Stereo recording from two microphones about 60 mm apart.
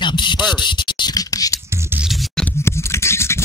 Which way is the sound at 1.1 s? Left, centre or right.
Left.